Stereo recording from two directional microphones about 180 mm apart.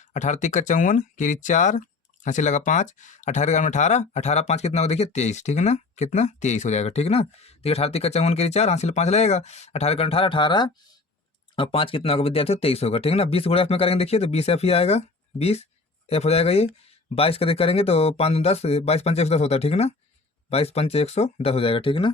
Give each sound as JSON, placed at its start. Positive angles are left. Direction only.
{"t": 0.1, "sound": "speech", "side_deg": 40}